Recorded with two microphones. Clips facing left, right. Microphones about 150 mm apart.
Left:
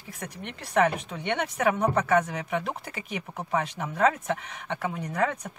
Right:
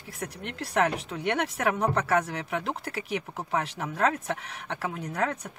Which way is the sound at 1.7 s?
10° left (ahead or behind).